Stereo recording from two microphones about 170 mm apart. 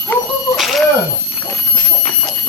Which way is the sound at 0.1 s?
Centre (ahead or behind).